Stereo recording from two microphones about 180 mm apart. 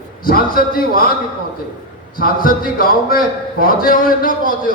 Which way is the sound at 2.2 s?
50° left (ahead or behind).